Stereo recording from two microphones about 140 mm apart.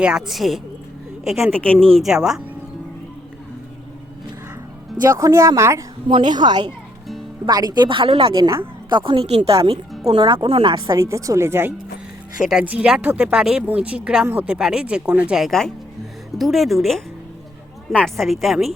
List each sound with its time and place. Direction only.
0.0 s a woman's voice: 5° right (ahead or behind)
5.0 s speech: 20° right (ahead or behind)
6.1 s speech: 35° right (ahead or behind)
10.8 s speech: 20° right (ahead or behind)
12.5 s a woman's voice: 10° right (ahead or behind)